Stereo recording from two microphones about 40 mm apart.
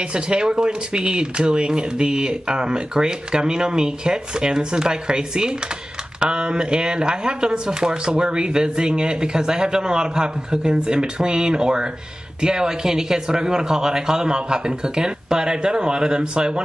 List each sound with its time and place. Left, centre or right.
0.1 s speech: right